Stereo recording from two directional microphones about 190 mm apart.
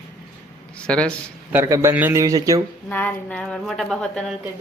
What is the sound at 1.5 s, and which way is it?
A man's voice, 15° right (ahead or behind).